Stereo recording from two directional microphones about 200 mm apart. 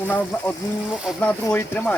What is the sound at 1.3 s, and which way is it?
Speech, 10° left (ahead or behind).